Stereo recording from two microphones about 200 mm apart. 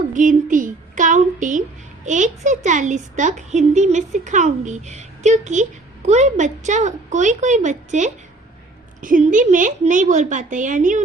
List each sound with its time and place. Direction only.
0.1 s a child's voice: 40° right (ahead or behind)
0.5 s a sound: 40° right (ahead or behind)
2.0 s a woman's voice: 35° right (ahead or behind)